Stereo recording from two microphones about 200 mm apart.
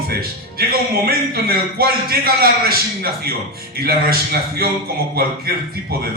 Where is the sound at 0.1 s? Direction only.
50° right (ahead or behind).